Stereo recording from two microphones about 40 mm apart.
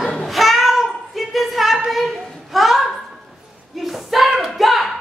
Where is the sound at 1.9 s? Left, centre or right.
Centre.